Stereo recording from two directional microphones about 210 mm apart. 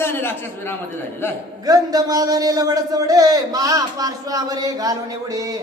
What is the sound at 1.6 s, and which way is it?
A man's voice, 20° right (ahead or behind).